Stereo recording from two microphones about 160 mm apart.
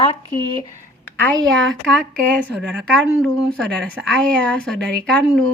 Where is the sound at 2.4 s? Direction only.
5° left (ahead or behind).